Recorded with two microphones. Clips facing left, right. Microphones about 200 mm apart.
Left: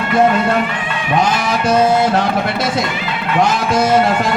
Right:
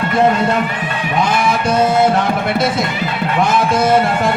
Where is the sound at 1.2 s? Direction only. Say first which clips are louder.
Right 3 dB; 55° right (ahead or behind).